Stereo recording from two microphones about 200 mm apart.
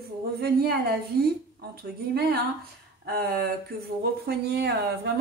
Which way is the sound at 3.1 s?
50° right (ahead or behind).